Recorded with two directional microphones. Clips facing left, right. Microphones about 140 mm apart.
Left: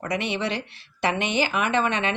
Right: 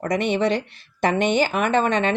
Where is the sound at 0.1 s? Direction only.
45° right (ahead or behind).